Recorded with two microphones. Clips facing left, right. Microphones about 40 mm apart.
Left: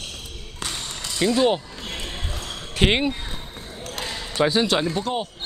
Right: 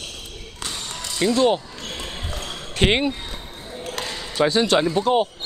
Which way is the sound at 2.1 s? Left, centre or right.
Centre.